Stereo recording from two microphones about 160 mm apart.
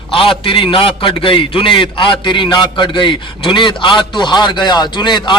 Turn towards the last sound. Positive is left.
turn(degrees=30)  # may be behind; listen again after turning